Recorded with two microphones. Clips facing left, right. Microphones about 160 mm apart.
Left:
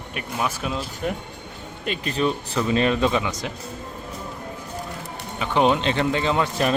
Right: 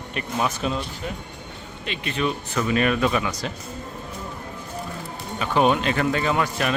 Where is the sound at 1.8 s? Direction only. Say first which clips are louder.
Left 2 dB; 40° left (ahead or behind); by 3.5 s 20° left (ahead or behind).